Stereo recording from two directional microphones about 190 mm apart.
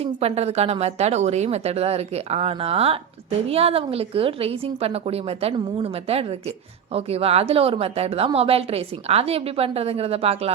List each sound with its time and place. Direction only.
0.0 s a woman's voice: 35° right (ahead or behind)